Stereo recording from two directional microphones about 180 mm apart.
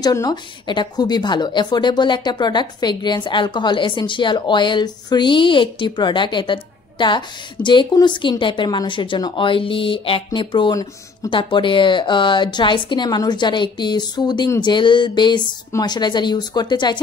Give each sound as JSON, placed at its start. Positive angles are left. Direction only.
{"t": 0.0, "sound": "a woman's voice", "side_deg": 20}